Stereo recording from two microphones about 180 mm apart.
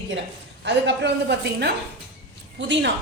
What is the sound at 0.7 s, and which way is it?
A woman's voice, 75° right (ahead or behind).